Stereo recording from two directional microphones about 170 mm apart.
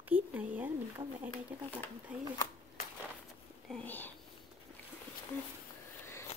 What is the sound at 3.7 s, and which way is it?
Whispering, 10° left (ahead or behind).